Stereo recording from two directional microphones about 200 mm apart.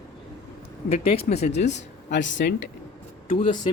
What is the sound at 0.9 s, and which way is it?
Speech, 30° left (ahead or behind).